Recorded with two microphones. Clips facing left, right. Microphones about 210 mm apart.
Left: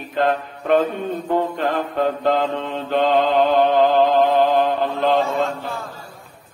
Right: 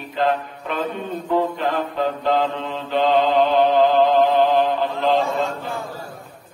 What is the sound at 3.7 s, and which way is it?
Music, 50° left (ahead or behind).